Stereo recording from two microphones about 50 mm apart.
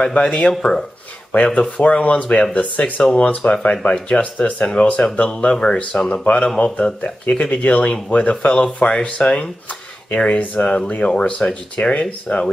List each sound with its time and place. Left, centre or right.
0.0 s speech: left
0.5 s speech: centre
1.3 s speech: left